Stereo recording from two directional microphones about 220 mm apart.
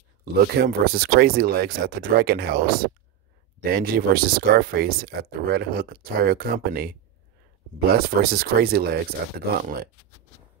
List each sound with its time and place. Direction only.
0.2 s speech: 45° right (ahead or behind)
3.6 s speech: 45° right (ahead or behind)